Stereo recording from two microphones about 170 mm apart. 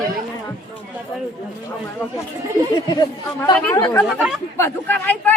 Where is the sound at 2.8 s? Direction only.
25° left (ahead or behind).